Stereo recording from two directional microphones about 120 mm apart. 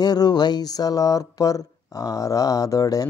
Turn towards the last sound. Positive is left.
turn(degrees=30)  # may be behind; listen again after turning